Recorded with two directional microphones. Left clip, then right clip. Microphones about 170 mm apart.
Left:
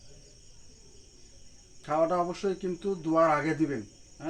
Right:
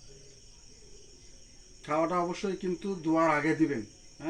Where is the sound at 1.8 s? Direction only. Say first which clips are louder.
Left 2 dB; 15° left (ahead or behind).